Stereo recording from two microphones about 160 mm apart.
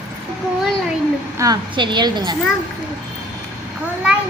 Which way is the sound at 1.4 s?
25° right (ahead or behind).